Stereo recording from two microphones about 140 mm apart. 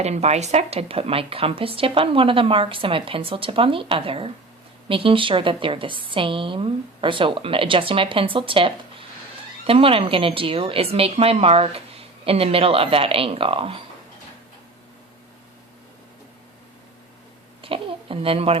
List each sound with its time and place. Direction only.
0.0 s a woman's voice: 50° right (ahead or behind)
17.6 s a child's voice: 40° right (ahead or behind)